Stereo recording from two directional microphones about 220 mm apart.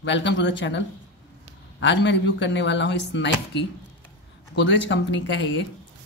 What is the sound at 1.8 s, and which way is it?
Speech, 55° left (ahead or behind).